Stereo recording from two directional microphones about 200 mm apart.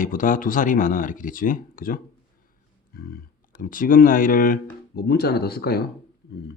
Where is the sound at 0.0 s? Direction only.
40° left (ahead or behind).